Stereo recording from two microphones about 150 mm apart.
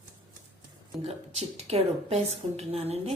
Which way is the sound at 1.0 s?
45° right (ahead or behind).